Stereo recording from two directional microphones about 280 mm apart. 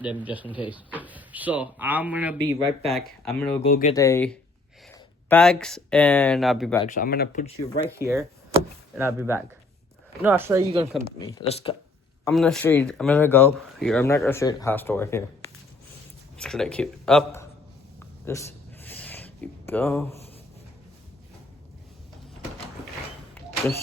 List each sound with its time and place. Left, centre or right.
0.0 s speech: centre
3.6 s speech: left
3.9 s speech: centre
6.8 s speech: left
7.9 s speech: centre
11.3 s speech: left
12.2 s speech: centre
16.4 s speech: centre
18.3 s a sound: centre